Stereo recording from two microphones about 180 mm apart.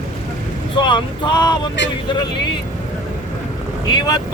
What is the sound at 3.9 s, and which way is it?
Speech, 20° left (ahead or behind).